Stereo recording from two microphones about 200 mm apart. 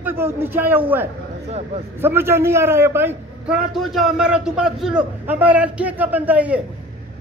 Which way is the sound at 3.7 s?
Centre (ahead or behind).